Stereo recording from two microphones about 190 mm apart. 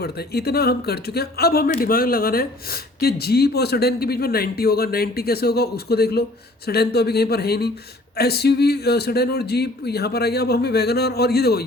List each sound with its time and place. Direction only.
0.0 s speech: 55° left (ahead or behind)